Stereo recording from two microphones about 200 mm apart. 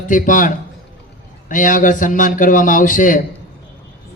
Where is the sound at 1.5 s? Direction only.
40° left (ahead or behind).